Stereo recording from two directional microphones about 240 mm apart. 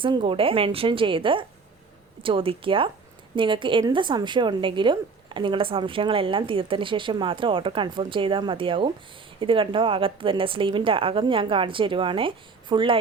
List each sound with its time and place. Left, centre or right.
0.0 s a woman's voice: right